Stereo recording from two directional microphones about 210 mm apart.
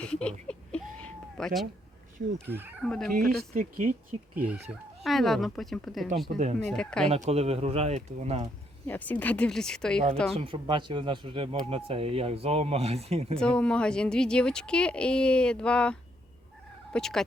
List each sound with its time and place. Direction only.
0.0 s a sound: 5° left (ahead or behind)
2.5 s speech: 10° right (ahead or behind)
2.8 s speech: centre (ahead or behind)
3.5 s speech: 40° right (ahead or behind)
4.4 s speech: 10° right (ahead or behind)
6.3 s speech: 35° right (ahead or behind)
6.7 s speech: 5° left (ahead or behind)
7.3 s speech: 30° right (ahead or behind)
8.9 s speech: 10° left (ahead or behind)
10.3 s speech: 25° right (ahead or behind)
13.4 s speech: 5° left (ahead or behind)